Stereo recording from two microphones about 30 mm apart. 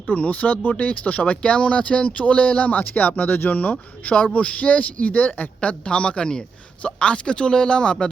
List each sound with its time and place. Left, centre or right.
0.1 s speech: left
0.8 s speech: left
1.4 s speech: left
4.1 s speech: left
5.6 s speech: left